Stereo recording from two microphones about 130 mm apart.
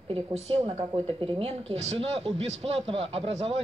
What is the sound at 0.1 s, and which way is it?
A man's voice, 55° right (ahead or behind).